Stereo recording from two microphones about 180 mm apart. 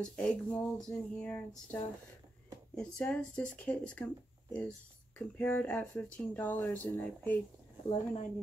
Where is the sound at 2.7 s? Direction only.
5° left (ahead or behind).